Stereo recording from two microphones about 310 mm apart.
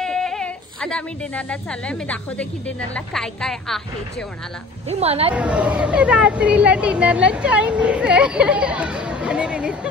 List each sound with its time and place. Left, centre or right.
0.0 s speech: centre
4.8 s a woman's voice: centre
5.3 s speech: centre